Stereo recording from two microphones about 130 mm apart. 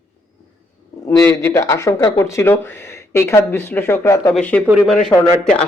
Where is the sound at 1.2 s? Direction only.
20° left (ahead or behind).